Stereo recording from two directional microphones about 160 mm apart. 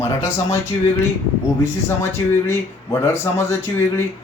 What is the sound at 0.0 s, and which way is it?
Speech, 20° left (ahead or behind).